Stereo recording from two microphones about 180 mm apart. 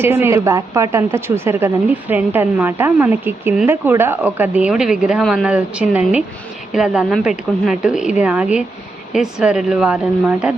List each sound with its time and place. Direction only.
0.0 s a woman's voice: 15° right (ahead or behind)